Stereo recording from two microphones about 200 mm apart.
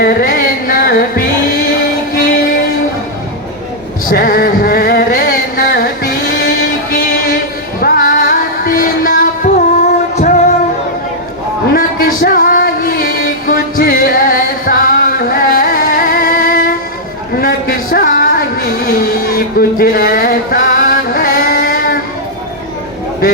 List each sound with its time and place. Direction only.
0.0 s music: 45° left (ahead or behind)
4.1 s music: 45° left (ahead or behind)
9.5 s music: 35° left (ahead or behind)
11.7 s a sound: 45° left (ahead or behind)
12.2 s music: 45° left (ahead or behind)
17.3 s a sound: 45° left (ahead or behind)